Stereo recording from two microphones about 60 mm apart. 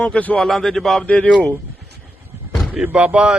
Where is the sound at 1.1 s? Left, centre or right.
Left.